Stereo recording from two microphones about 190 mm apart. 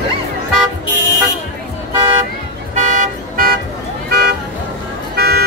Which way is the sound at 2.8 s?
40° right (ahead or behind).